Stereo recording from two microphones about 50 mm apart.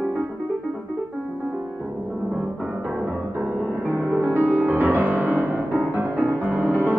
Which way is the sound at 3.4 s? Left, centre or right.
Right.